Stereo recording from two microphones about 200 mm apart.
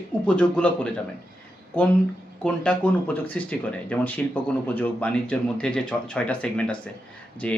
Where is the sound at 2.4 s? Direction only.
5° left (ahead or behind).